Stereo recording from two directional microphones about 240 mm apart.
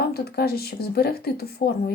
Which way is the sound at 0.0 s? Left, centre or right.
Left.